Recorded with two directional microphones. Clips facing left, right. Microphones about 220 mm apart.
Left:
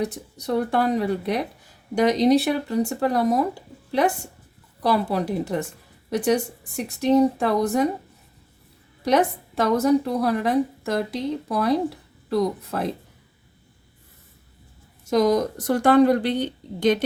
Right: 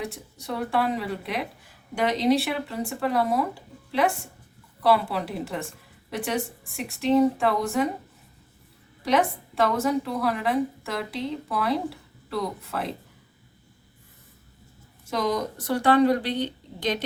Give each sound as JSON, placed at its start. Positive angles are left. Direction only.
{"t": 0.0, "sound": "a woman's voice", "side_deg": 40}
{"t": 4.8, "sound": "a woman's voice", "side_deg": 45}
{"t": 7.0, "sound": "a woman's voice", "side_deg": 40}
{"t": 9.0, "sound": "a woman's voice", "side_deg": 40}
{"t": 15.1, "sound": "a woman's voice", "side_deg": 45}